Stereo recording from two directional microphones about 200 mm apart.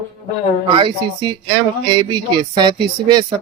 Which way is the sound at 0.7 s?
25° right (ahead or behind).